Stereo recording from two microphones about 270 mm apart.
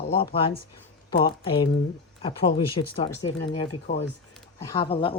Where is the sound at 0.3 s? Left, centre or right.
Centre.